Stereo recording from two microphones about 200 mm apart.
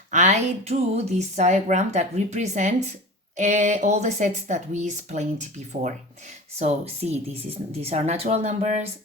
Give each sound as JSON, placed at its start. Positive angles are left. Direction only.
{"t": 0.1, "sound": "speech", "side_deg": -35}